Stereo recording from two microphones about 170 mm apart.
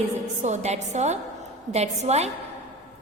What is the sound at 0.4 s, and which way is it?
A woman's voice, 40° right (ahead or behind).